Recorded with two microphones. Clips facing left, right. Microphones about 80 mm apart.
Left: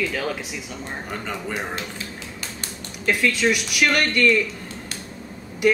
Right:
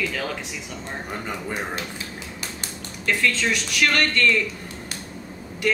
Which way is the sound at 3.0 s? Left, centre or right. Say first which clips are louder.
Left 2 dB; centre.